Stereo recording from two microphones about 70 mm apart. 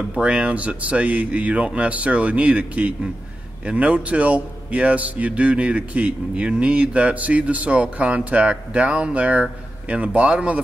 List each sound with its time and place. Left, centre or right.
0.1 s a man's voice: centre